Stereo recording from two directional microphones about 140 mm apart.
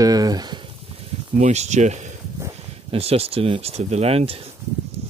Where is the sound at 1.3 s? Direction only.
55° right (ahead or behind).